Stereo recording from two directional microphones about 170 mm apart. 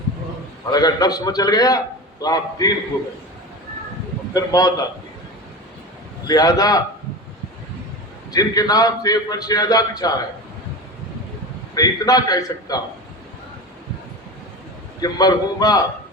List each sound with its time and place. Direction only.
0.7 s a man's voice: 25° left (ahead or behind)
4.4 s a man's voice: 20° left (ahead or behind)
6.2 s a man's voice: 25° left (ahead or behind)
8.3 s a man's voice: 20° left (ahead or behind)
11.7 s a man's voice: 20° left (ahead or behind)
15.0 s a man's voice: 25° left (ahead or behind)